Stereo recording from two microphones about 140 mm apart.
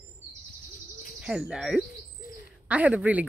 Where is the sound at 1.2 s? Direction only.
5° right (ahead or behind).